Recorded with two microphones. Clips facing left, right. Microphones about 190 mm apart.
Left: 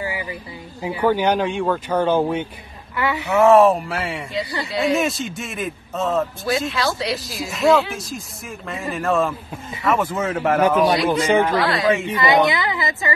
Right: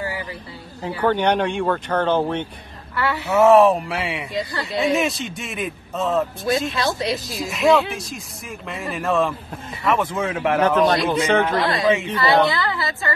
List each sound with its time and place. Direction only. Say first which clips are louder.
0.0 s a sound: left 1 dB; 10° left (ahead or behind)
0.8 s speech: left 1 dB; 10° left (ahead or behind)
3.3 s speech: even; centre (ahead or behind)
6.7 s speech: even; 20° right (ahead or behind)
7.3 s speech: left 1 dB; centre (ahead or behind)
12.1 s speech: left 1 dB; 20° left (ahead or behind)